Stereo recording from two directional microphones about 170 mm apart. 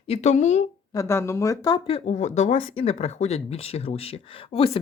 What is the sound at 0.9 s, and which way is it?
Speech, 15° left (ahead or behind).